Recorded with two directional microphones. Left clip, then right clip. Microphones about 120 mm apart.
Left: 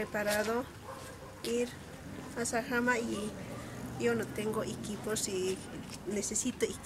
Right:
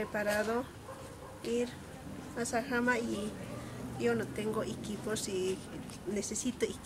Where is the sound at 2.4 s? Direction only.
5° left (ahead or behind).